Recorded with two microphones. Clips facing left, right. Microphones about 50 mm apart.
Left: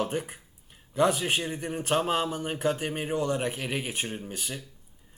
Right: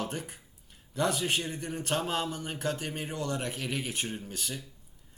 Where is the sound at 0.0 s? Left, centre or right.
Centre.